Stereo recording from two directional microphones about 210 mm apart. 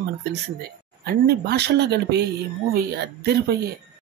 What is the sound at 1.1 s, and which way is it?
Speech, 50° right (ahead or behind).